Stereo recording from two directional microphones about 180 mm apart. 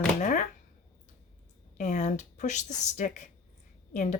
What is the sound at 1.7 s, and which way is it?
Speech, 45° left (ahead or behind).